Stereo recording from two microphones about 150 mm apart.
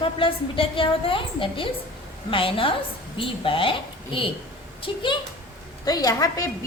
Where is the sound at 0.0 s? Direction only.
35° left (ahead or behind).